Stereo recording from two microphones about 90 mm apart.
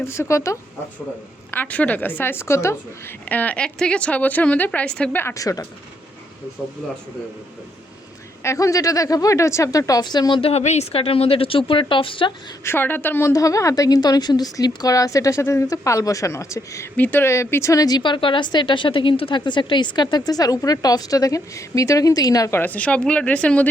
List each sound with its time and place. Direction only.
0.0 s a woman's voice: 30° left (ahead or behind)
1.5 s a woman's voice: 20° left (ahead or behind)
3.2 s a woman's voice: 20° left (ahead or behind)
5.3 s a woman's voice: 40° left (ahead or behind)
8.4 s a woman's voice: 35° left (ahead or behind); by 10.4 s 50° left (ahead or behind)
10.9 s a woman's voice: 90° left; by 12.3 s 70° left (ahead or behind)
12.6 s a woman's voice: 25° left (ahead or behind)
13.3 s a woman's voice: 40° left (ahead or behind)
17.0 s speech: 25° left (ahead or behind); by 22.5 s 40° left (ahead or behind)
22.5 s a woman's voice: 20° left (ahead or behind)